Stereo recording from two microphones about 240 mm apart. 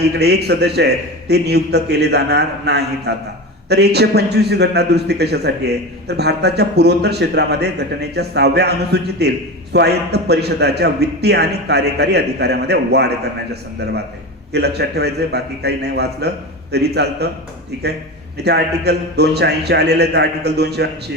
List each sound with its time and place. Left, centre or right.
0.0 s a man's voice: right
18.4 s a man's voice: right